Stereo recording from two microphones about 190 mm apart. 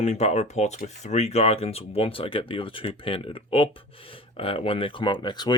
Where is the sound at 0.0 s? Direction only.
35° left (ahead or behind).